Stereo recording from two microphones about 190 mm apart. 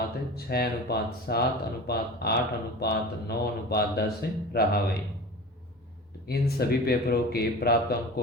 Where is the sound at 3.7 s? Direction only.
55° left (ahead or behind).